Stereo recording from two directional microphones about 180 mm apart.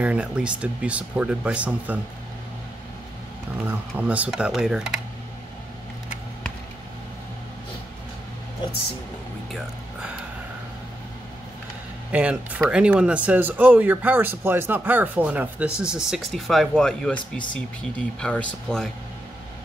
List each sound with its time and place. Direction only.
0.0 s speech: 5° right (ahead or behind)
3.6 s speech: 10° right (ahead or behind)
12.1 s speech: 5° right (ahead or behind)